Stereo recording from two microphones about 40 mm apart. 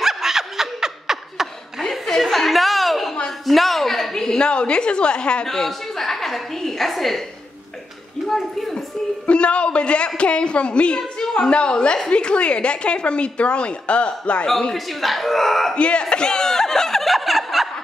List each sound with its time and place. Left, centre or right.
0.0 s snicker: centre
1.8 s chuckle: centre
3.3 s a sound: centre
4.5 s speech: left
5.5 s a woman's voice: centre
8.3 s speech: centre
8.7 s speech: left
14.7 s speech: centre
15.7 s snicker: left; by 17.6 s centre